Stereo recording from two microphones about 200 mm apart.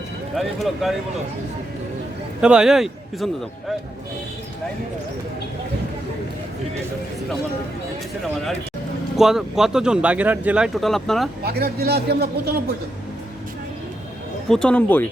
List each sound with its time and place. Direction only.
0.3 s speech: centre (ahead or behind)
2.4 s speech: 5° right (ahead or behind)
9.1 s speech: centre (ahead or behind)
11.4 s a man's voice: 50° right (ahead or behind)
14.5 s speech: 5° left (ahead or behind)